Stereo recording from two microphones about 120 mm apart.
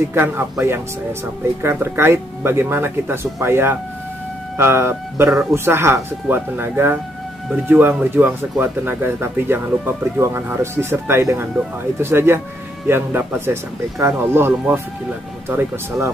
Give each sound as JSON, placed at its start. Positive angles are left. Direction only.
{"t": 0.1, "sound": "speech", "side_deg": -20}